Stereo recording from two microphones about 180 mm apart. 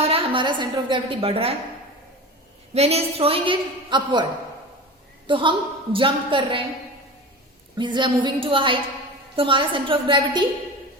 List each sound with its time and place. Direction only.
0.0 s a woman's voice: 35° right (ahead or behind)
2.7 s a woman's voice: 35° right (ahead or behind)
7.8 s a woman's voice: 25° right (ahead or behind)